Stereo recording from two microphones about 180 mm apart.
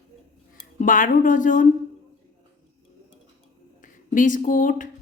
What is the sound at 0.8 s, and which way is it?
Speech, 45° left (ahead or behind).